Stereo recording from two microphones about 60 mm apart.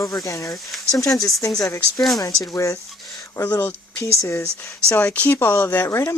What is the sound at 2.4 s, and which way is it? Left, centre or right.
Speech, left.